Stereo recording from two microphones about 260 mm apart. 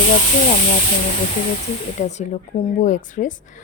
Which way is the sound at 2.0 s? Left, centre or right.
Left.